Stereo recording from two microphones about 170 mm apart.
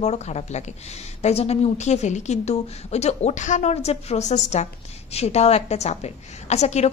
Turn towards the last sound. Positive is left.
turn(degrees=40)  # may be behind; listen again after turning